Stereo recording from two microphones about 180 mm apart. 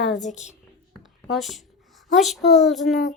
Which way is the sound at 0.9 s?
Centre (ahead or behind).